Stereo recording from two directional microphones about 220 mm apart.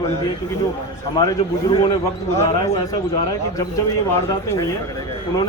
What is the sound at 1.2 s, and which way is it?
A man's voice, 20° left (ahead or behind).